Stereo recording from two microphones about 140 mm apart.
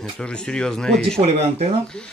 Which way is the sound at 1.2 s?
50° right (ahead or behind).